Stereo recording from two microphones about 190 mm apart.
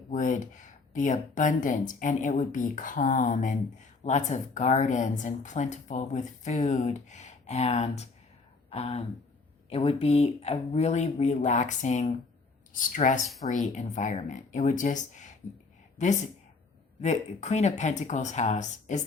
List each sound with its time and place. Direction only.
0.1 s speech: 40° left (ahead or behind)